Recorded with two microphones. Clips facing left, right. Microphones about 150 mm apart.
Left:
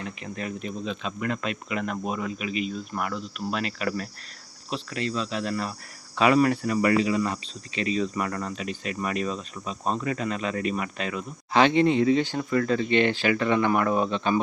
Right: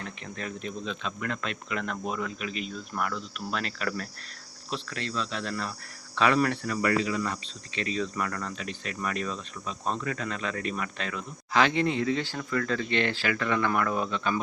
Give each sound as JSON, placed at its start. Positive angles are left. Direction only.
{"t": 0.0, "sound": "speech", "side_deg": 5}